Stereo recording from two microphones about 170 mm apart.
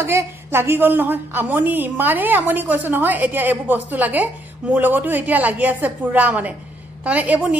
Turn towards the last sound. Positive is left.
turn(degrees=-10)  # may be behind; listen again after turning